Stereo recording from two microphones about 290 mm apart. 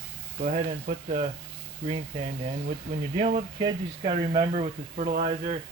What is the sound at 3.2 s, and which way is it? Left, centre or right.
Speech, right.